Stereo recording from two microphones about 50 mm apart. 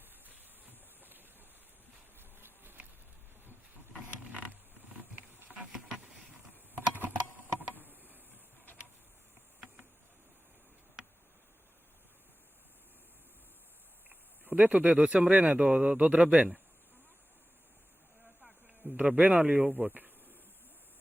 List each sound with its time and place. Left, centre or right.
0.0 s a sound: right
2.3 s insect: right
4.2 s mechanisms: right
5.7 s a sound: centre
6.5 s typing: right
7.8 s a sound: right
14.4 s speech: right
14.8 s speech: right
18.8 s speech: right